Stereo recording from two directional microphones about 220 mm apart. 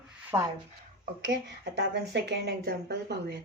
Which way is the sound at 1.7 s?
50° right (ahead or behind).